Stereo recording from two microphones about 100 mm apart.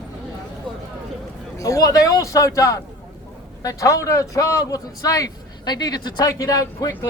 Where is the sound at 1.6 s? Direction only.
35° left (ahead or behind).